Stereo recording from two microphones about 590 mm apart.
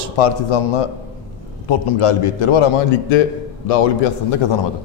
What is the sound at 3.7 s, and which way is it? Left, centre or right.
Speech, left.